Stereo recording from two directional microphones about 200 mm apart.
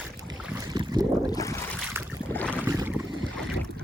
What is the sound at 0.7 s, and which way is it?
Boat, 20° right (ahead or behind).